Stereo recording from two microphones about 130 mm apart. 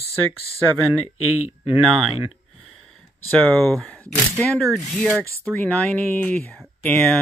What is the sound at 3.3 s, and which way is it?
Speech, 10° left (ahead or behind).